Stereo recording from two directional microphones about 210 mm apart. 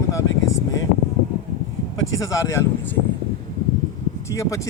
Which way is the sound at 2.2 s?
15° left (ahead or behind).